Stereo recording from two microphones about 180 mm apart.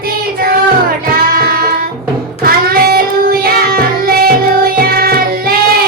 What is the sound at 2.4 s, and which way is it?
Child singing, 55° right (ahead or behind).